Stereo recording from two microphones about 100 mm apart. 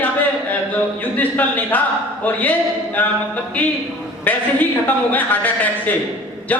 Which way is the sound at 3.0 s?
15° left (ahead or behind).